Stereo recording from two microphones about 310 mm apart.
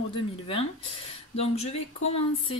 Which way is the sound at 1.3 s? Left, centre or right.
Centre.